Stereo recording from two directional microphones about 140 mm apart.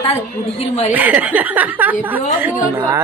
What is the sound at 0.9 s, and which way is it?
A woman's voice, 10° right (ahead or behind).